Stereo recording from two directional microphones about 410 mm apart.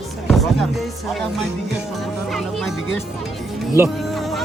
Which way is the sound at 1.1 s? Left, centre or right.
Centre.